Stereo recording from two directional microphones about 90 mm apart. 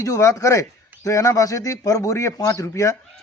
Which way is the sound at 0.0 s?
35° left (ahead or behind).